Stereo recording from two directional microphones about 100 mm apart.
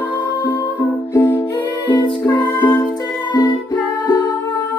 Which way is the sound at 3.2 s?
50° left (ahead or behind).